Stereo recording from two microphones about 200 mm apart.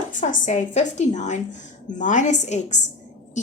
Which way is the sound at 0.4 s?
35° left (ahead or behind).